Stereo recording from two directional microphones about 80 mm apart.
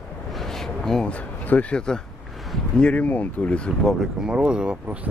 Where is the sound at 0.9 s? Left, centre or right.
Centre.